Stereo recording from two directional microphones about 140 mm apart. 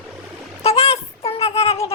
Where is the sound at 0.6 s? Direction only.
45° left (ahead or behind).